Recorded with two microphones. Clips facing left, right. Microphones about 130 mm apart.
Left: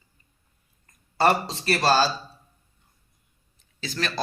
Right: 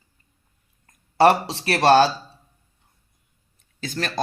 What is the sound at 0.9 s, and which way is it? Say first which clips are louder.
Speech: right 5 dB; 70° right (ahead or behind).